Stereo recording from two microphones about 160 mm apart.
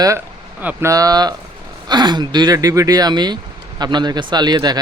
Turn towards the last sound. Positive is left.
turn(degrees=-25)  # may be behind; listen again after turning